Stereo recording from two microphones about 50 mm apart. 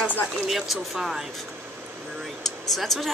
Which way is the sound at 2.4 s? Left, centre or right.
Centre.